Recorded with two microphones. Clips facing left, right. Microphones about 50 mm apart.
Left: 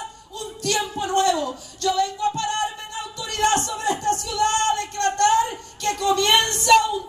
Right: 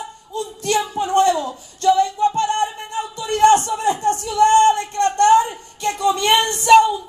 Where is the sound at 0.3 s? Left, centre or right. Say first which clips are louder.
Right 5 dB; right.